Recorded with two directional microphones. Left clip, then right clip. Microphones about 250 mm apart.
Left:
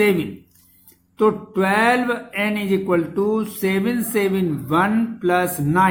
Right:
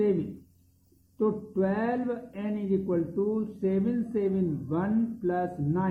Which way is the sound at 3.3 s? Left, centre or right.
Left.